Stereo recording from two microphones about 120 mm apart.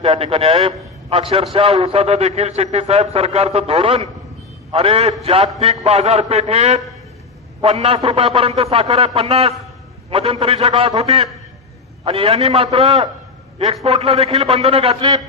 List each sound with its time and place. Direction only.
0.0 s a man's voice: 50° right (ahead or behind)